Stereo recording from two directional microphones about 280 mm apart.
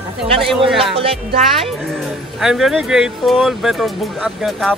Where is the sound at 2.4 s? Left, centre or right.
Centre.